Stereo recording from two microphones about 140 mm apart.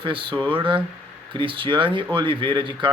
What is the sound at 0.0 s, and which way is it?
A man's voice, 35° right (ahead or behind).